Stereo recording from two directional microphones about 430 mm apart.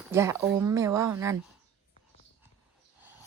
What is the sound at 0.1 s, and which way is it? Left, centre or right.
Speech, centre.